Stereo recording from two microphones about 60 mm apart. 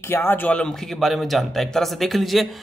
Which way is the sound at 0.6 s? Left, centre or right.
Centre.